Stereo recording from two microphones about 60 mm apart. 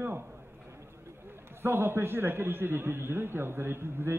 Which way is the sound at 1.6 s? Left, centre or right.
Right.